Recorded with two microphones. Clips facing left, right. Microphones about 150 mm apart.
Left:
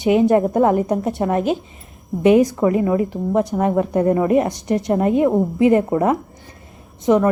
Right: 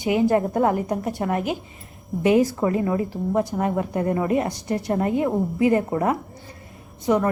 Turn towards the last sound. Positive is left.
turn(degrees=20)  # may be behind; listen again after turning